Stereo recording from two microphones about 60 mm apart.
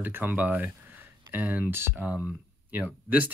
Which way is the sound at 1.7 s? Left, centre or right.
Right.